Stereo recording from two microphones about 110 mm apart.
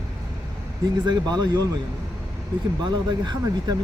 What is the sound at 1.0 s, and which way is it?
Speech, 40° right (ahead or behind).